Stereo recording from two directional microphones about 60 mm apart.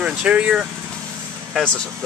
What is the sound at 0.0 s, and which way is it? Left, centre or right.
Speech, centre.